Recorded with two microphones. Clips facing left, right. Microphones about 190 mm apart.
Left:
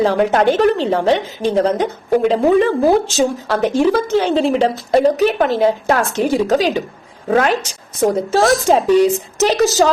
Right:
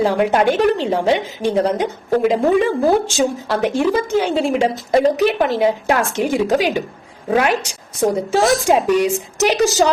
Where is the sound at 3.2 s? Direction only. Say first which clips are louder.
Left 2 dB; 10° right (ahead or behind).